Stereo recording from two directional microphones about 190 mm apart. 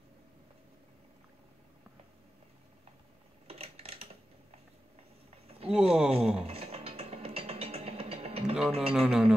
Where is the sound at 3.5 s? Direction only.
30° right (ahead or behind).